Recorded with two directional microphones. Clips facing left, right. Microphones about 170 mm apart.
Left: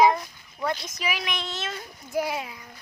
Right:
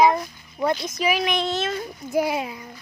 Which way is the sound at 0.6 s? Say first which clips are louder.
Right 6 dB; 25° right (ahead or behind).